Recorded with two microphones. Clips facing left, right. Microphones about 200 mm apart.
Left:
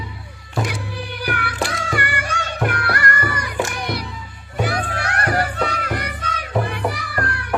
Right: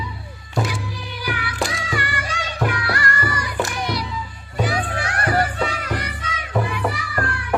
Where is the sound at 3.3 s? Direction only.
60° left (ahead or behind).